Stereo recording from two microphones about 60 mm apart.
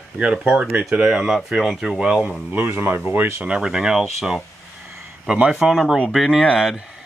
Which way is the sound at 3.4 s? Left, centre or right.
Centre.